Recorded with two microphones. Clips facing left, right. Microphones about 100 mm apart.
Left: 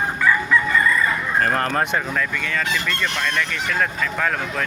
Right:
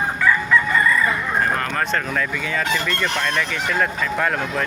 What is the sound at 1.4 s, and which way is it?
Speech, 45° left (ahead or behind).